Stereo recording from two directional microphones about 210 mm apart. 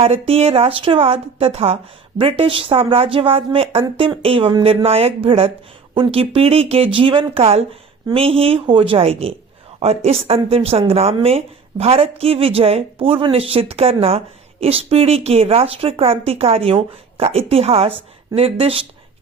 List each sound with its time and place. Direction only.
0.0 s a woman's voice: 30° right (ahead or behind)